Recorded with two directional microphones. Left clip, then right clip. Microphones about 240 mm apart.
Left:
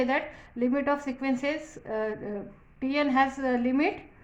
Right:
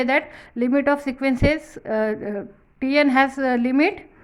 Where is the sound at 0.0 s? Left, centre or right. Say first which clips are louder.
Right 7 dB; right.